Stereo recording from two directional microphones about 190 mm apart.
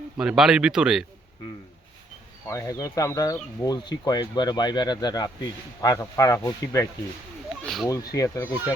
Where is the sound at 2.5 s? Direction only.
15° left (ahead or behind).